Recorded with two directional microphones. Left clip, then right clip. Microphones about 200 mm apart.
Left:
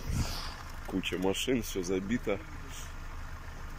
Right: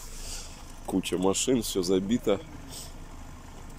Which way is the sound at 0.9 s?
20° right (ahead or behind).